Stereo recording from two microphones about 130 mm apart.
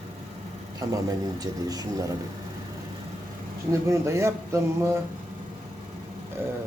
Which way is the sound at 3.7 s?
25° right (ahead or behind).